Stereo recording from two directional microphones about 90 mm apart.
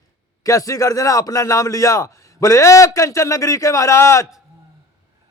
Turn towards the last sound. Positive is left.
turn(degrees=35)  # may be behind; listen again after turning